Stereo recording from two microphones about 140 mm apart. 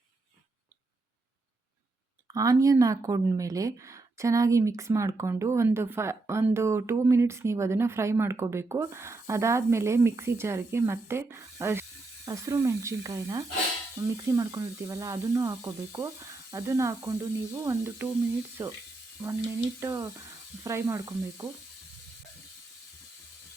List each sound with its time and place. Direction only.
2.3 s speech: 25° right (ahead or behind)
19.2 s speech: 20° right (ahead or behind)